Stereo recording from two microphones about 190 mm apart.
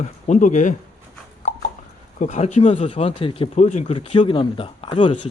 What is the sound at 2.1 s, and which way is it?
Speech, 40° left (ahead or behind).